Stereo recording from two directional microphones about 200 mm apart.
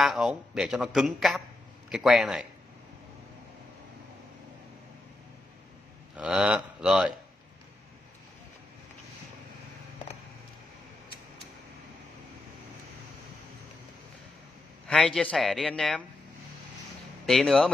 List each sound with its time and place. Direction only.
0.0 s speech: centre (ahead or behind)
6.1 s speech: 5° right (ahead or behind)
14.9 s speech: centre (ahead or behind)
17.3 s speech: centre (ahead or behind)